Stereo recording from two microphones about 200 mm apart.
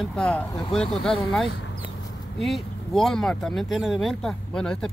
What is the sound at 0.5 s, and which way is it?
Speech, 20° left (ahead or behind).